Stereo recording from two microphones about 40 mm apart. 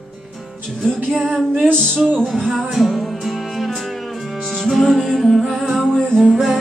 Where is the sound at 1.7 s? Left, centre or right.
Centre.